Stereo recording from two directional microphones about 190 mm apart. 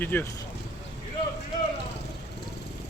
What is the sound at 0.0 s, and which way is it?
Speech, 10° left (ahead or behind).